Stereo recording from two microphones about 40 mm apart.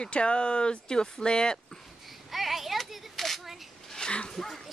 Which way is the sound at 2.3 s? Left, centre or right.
Centre.